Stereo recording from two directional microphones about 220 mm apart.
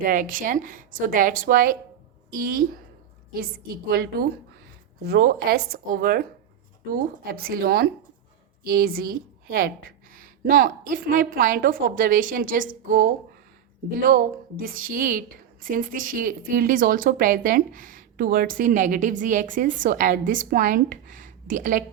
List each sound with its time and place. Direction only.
0.0 s a woman's voice: 35° right (ahead or behind)